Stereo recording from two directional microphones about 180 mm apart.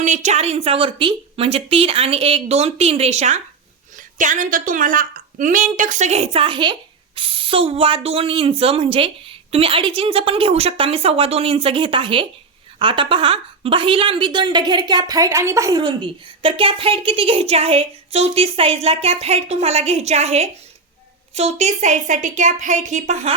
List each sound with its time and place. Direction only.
0.0 s a woman's voice: 40° right (ahead or behind); by 15.8 s 15° right (ahead or behind)
15.8 s speech: 30° right (ahead or behind)